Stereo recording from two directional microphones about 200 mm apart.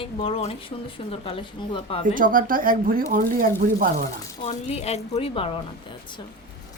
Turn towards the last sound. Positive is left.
turn(degrees=30)  # may be behind; listen again after turning